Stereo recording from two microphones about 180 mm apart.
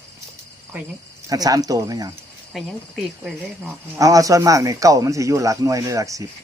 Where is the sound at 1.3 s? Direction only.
20° right (ahead or behind).